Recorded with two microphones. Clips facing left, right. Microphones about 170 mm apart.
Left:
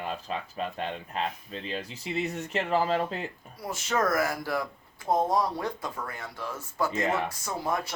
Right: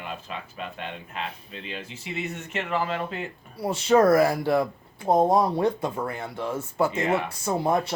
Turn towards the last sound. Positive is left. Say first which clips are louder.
# right 7 dB
turn(degrees=-30)  # may be behind; listen again after turning